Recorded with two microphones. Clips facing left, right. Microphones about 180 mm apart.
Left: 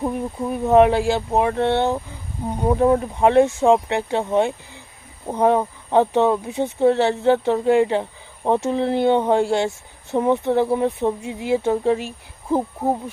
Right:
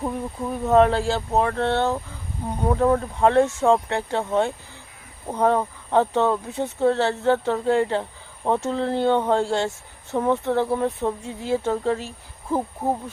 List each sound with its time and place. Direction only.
0.0 s speech: 10° left (ahead or behind)